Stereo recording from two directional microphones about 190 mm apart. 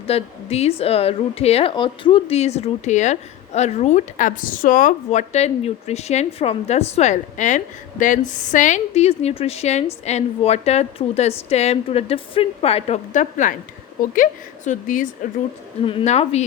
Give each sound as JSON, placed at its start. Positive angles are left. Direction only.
{"t": 0.1, "sound": "a woman's voice", "side_deg": 35}
{"t": 15.9, "sound": "a woman's voice", "side_deg": 30}